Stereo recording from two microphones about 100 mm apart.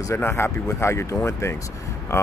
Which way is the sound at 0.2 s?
25° left (ahead or behind).